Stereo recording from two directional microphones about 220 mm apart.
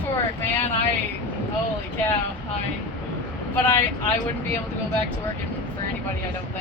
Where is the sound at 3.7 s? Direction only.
10° left (ahead or behind).